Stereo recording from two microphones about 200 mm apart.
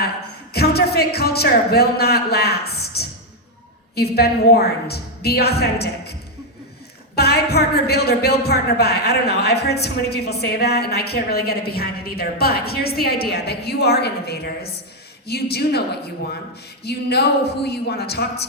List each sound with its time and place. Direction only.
0.5 s a woman's voice: 50° left (ahead or behind)
7.2 s a woman's voice: 55° left (ahead or behind)
16.8 s a woman's voice: 55° left (ahead or behind)